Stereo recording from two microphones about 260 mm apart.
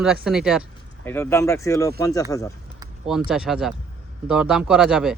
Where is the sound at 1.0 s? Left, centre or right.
Centre.